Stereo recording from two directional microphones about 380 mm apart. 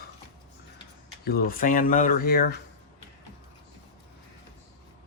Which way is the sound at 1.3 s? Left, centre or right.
Left.